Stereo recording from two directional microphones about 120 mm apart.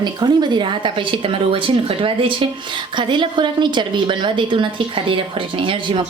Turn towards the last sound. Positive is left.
turn(degrees=-40)  # may be behind; listen again after turning